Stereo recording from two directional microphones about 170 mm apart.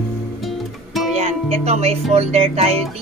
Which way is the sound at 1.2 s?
40° right (ahead or behind).